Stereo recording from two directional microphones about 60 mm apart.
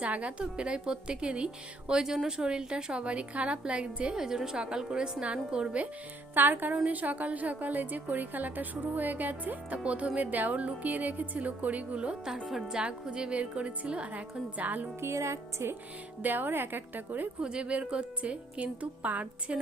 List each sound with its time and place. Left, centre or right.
0.0 s a woman's voice: right
6.3 s a woman's voice: right
15.0 s music: right
16.2 s a woman's voice: right
17.4 s a woman's voice: centre